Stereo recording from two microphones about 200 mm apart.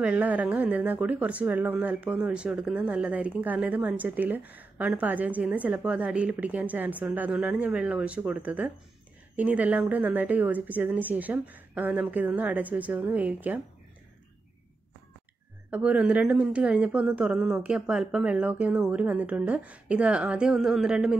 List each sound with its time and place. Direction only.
0.0 s speech: 5° right (ahead or behind)
15.7 s a woman's voice: 5° right (ahead or behind)